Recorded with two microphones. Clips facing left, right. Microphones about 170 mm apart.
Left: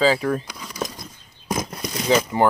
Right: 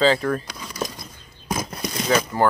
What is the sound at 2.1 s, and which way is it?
Speech, 20° left (ahead or behind).